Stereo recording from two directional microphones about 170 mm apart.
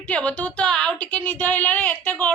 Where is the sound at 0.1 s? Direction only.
10° left (ahead or behind).